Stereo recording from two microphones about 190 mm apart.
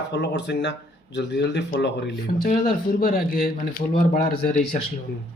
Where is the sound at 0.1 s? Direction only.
65° left (ahead or behind); by 4.6 s 45° left (ahead or behind).